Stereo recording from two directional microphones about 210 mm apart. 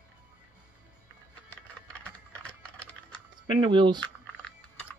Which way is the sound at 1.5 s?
5° left (ahead or behind).